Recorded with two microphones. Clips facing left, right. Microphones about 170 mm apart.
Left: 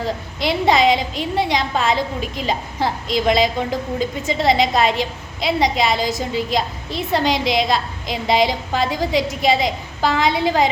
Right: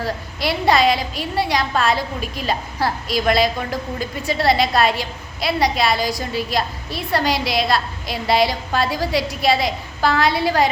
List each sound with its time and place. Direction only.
0.0 s a woman's voice: 20° left (ahead or behind)